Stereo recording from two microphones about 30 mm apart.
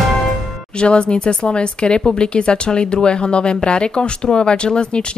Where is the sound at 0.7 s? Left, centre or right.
Left.